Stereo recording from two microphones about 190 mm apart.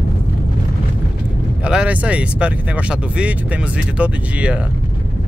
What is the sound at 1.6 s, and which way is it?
Speech, 5° right (ahead or behind).